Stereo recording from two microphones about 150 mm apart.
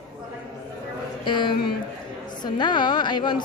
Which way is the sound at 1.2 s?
30° left (ahead or behind).